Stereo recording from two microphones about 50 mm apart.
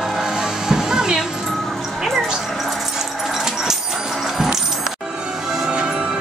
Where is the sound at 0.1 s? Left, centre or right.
Centre.